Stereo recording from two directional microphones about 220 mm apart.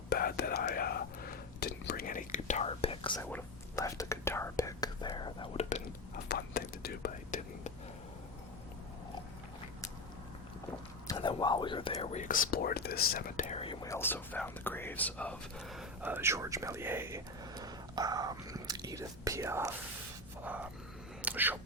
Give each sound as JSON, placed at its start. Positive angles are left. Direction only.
{"t": 0.1, "sound": "whispering", "side_deg": 45}
{"t": 3.2, "sound": "whispering", "side_deg": 10}
{"t": 6.2, "sound": "whispering", "side_deg": 45}
{"t": 11.1, "sound": "speech", "side_deg": 20}
{"t": 13.1, "sound": "whispering", "side_deg": 40}
{"t": 13.8, "sound": "speech", "side_deg": 10}
{"t": 20.4, "sound": "music", "side_deg": -5}
{"t": 21.2, "sound": "whispering", "side_deg": -5}